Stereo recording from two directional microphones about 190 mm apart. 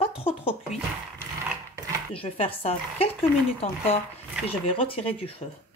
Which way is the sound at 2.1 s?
30° left (ahead or behind).